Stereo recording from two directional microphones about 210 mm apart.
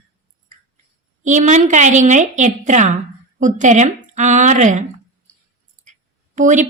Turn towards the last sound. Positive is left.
turn(degrees=-35)  # may be behind; listen again after turning